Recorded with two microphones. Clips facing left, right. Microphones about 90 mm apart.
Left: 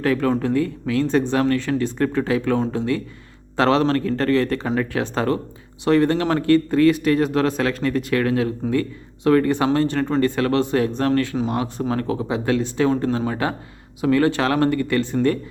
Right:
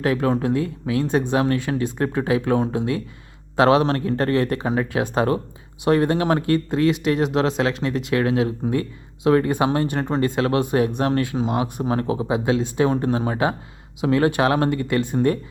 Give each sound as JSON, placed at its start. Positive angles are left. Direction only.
{"t": 0.0, "sound": "speech", "side_deg": -20}